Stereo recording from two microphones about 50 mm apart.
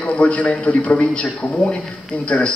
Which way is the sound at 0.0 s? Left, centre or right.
Left.